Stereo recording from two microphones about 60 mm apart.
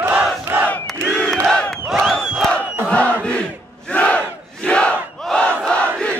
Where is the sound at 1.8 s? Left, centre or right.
Centre.